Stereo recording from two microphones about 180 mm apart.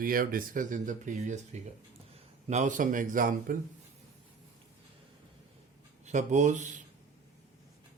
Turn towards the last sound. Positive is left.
turn(degrees=-45)  # may be behind; listen again after turning